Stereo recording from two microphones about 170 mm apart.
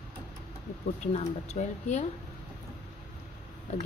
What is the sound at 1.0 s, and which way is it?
Speech, 40° left (ahead or behind).